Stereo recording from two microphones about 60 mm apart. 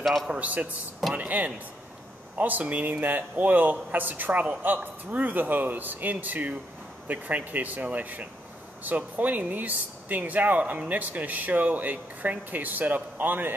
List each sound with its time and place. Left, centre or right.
0.0 s a man's voice: centre
0.3 s a man's voice: right